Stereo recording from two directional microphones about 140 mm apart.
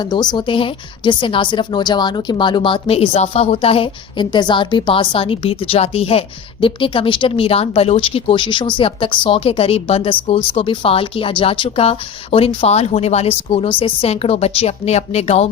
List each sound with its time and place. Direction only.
0.0 s speech: 30° left (ahead or behind); by 15.4 s 50° left (ahead or behind)